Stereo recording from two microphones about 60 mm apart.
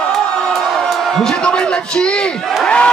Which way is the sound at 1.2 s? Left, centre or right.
Centre.